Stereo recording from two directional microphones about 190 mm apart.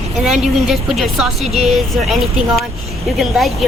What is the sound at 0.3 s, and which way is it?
A woman's voice, centre (ahead or behind).